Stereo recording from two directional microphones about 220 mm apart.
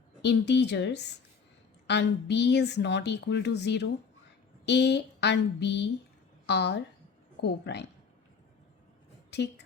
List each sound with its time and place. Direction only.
0.2 s a woman's voice: 50° left (ahead or behind)
9.3 s a woman's voice: 50° left (ahead or behind)